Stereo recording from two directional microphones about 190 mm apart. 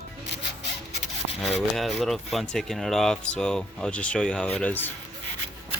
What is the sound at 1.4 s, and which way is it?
Rub, 35° left (ahead or behind).